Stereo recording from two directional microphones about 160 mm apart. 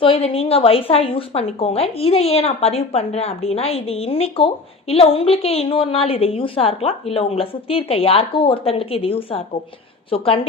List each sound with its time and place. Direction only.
0.0 s speech: 35° left (ahead or behind)